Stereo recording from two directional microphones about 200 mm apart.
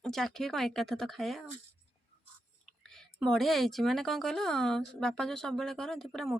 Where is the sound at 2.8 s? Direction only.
5° left (ahead or behind).